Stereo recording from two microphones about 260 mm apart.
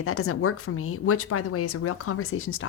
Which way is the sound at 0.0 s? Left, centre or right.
Left.